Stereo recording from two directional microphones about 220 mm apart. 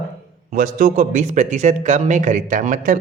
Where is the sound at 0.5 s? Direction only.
40° right (ahead or behind).